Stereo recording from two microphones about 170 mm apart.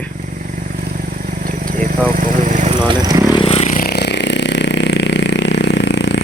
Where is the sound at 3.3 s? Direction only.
30° left (ahead or behind).